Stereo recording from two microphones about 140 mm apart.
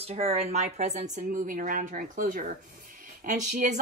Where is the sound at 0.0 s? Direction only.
45° right (ahead or behind); by 2.4 s 90° right.